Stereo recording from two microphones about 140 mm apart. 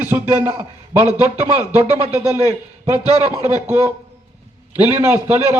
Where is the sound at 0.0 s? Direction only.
15° right (ahead or behind).